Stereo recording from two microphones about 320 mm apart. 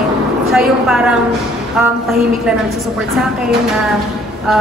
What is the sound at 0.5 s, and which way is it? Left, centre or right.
Speech, centre.